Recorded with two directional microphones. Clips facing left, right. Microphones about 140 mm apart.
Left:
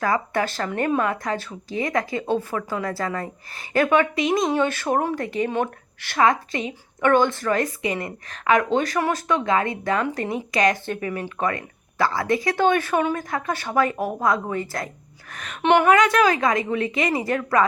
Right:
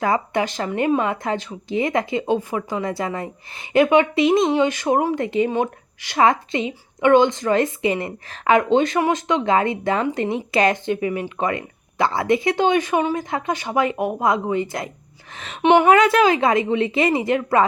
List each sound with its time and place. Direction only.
0.0 s a woman's voice: 20° right (ahead or behind)
4.5 s speech: 15° right (ahead or behind)
6.2 s a woman's voice: 25° right (ahead or behind)
10.8 s a woman's voice: 15° right (ahead or behind)
15.6 s speech: 10° right (ahead or behind)
15.9 s a woman's voice: 30° right (ahead or behind)